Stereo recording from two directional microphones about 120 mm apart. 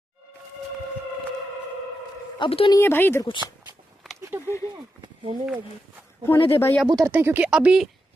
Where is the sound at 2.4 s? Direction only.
50° left (ahead or behind).